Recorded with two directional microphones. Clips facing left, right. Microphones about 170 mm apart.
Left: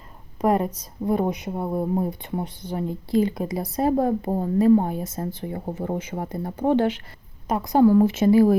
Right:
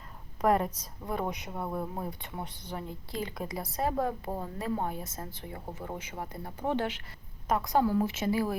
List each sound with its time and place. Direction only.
0.4 s speech: 20° left (ahead or behind); by 6.9 s 40° left (ahead or behind)
7.4 s a woman's voice: 25° left (ahead or behind)
7.8 s speech: 55° left (ahead or behind)
8.0 s speech: 40° left (ahead or behind)